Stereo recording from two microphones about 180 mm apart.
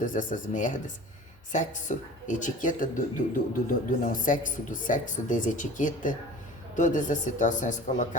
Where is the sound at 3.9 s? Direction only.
50° left (ahead or behind).